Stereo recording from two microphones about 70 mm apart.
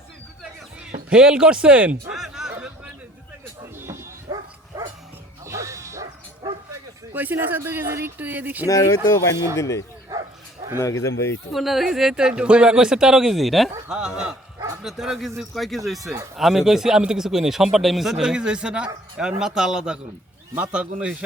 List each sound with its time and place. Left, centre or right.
0.8 s speech: centre
2.1 s a sound: centre
4.3 s dog: right
5.5 s bow-wow: right
7.1 s speech: right
8.6 s speech: left
11.5 s a man's voice: centre
13.8 s a man's voice: centre